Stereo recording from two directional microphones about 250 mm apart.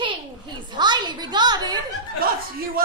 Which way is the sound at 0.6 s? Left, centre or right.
Centre.